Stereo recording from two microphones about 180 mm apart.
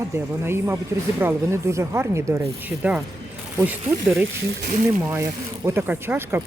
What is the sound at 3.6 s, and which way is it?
Speech, 10° right (ahead or behind).